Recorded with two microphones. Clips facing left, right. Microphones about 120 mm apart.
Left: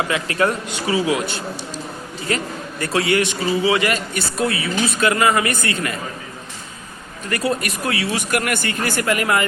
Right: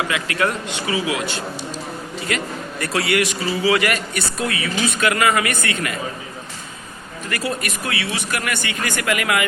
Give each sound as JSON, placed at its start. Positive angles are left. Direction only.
{"t": 0.1, "sound": "a man's voice", "side_deg": 30}
{"t": 7.3, "sound": "speech", "side_deg": 30}
{"t": 7.9, "sound": "speech", "side_deg": 45}